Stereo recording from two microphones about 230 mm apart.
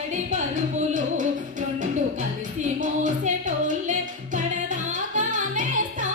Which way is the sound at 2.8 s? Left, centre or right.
Right.